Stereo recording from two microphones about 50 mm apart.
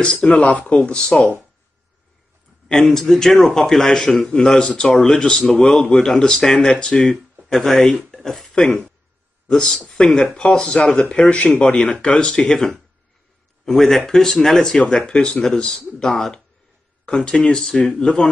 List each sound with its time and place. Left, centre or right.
0.0 s speech: centre
2.7 s speech: centre
7.4 s speech: centre
8.1 s a sound: centre
8.5 s speech: centre
14.8 s speech: centre
16.1 s speech: centre
17.0 s speech: centre